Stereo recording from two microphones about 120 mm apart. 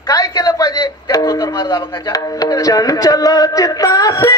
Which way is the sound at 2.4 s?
30° left (ahead or behind).